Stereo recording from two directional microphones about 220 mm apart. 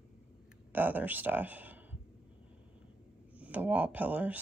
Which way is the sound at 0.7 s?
10° right (ahead or behind).